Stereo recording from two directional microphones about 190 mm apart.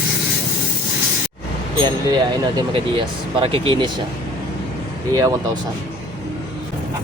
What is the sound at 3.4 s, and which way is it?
Speech, 25° right (ahead or behind).